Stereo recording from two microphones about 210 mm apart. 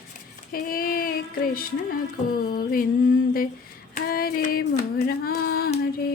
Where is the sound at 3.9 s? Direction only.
45° left (ahead or behind).